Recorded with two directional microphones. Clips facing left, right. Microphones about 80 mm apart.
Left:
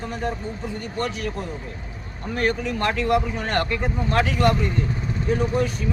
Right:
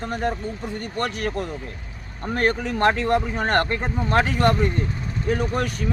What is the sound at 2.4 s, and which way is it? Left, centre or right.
Speech, right.